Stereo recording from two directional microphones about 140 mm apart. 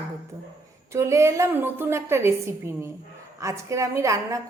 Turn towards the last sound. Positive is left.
turn(degrees=-20)  # may be behind; listen again after turning